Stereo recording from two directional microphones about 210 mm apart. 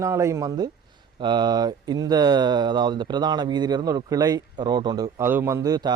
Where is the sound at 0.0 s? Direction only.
15° right (ahead or behind).